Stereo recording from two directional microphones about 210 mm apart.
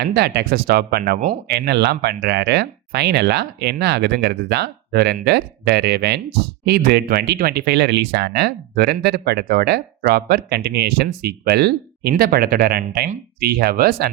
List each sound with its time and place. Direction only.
0.0 s speech: 50° right (ahead or behind)